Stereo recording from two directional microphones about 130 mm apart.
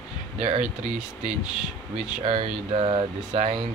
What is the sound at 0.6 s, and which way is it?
Speech, 5° right (ahead or behind).